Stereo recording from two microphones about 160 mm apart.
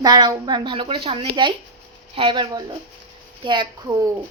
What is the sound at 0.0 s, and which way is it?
A woman's voice, 25° right (ahead or behind).